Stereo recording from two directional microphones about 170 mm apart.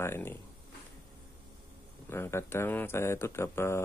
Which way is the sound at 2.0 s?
15° left (ahead or behind).